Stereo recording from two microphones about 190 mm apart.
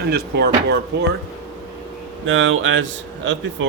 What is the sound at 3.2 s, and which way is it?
Speech, 80° right.